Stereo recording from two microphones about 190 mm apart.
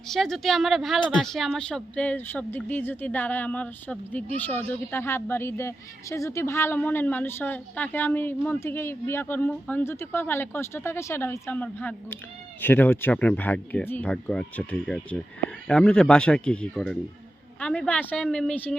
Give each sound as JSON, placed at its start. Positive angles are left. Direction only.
{"t": 0.1, "sound": "speech", "side_deg": 0}